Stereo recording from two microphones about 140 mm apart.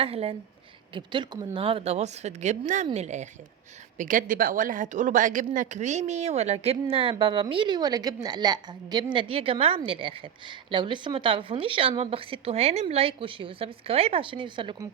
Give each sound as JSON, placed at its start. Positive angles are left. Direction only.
{"t": 0.0, "sound": "speech", "side_deg": -45}
{"t": 0.9, "sound": "a woman's voice", "side_deg": -35}
{"t": 3.9, "sound": "speech", "side_deg": -70}
{"t": 6.9, "sound": "a woman's voice", "side_deg": -40}